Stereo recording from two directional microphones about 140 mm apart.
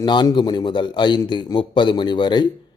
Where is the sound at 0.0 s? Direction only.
30° left (ahead or behind).